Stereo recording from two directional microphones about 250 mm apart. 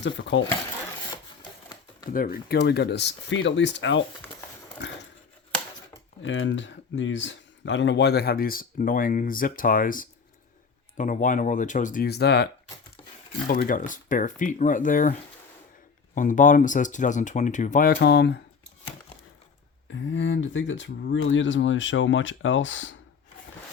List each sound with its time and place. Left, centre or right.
0.0 s speech: left
1.1 s a sound: centre
2.1 s speech: left
6.2 s speech: left
13.5 s speech: left
16.1 s speech: left
19.9 s speech: left